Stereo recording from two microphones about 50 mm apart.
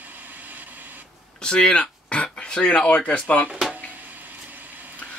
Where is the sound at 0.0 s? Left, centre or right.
Right.